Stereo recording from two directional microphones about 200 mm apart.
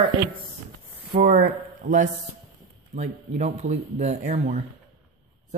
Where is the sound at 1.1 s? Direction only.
40° right (ahead or behind).